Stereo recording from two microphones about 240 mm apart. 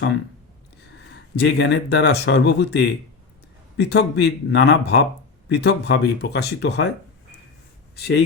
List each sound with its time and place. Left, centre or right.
1.4 s speech: left
7.9 s speech: left